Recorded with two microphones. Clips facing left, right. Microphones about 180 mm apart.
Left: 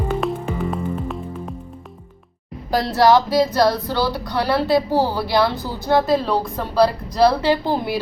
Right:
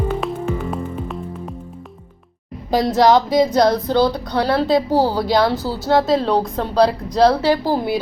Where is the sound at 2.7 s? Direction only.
15° right (ahead or behind).